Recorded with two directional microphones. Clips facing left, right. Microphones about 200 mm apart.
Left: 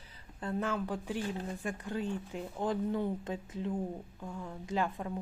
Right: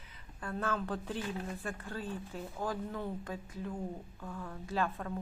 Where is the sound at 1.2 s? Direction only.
30° left (ahead or behind).